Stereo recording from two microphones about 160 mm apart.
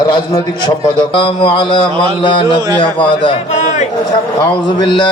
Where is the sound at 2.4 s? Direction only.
25° right (ahead or behind).